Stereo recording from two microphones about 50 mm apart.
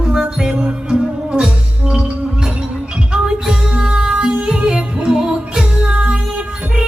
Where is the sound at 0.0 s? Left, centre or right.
Centre.